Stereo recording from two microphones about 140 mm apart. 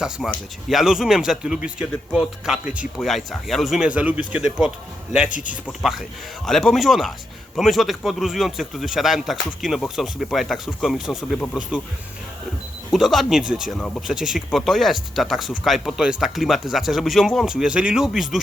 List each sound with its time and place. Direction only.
0.2 s speech: 5° right (ahead or behind)
5.8 s speech: centre (ahead or behind)
12.9 s speech: centre (ahead or behind)
14.2 s speech: 5° right (ahead or behind)